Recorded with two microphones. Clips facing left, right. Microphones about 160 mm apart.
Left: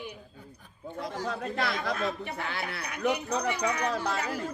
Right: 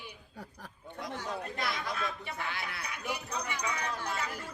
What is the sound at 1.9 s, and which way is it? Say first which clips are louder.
Speech: left 5 dB; 55° left (ahead or behind).